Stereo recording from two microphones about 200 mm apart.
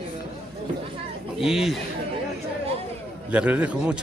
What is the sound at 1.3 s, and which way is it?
Speech, centre (ahead or behind).